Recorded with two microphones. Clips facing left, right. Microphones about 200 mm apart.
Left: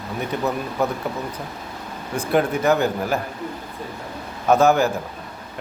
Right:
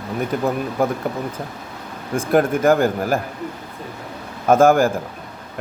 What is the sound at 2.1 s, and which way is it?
Speech, 50° right (ahead or behind).